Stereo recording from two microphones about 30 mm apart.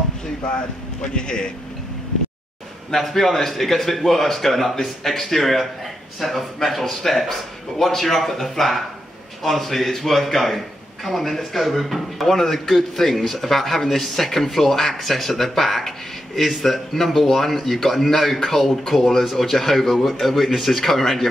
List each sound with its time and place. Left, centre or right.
1.0 s a man's voice: left
3.0 s speech: centre
12.3 s speech: centre
12.5 s speech: centre